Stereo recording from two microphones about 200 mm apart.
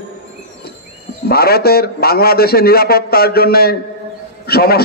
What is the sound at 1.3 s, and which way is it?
A man's voice, 50° left (ahead or behind).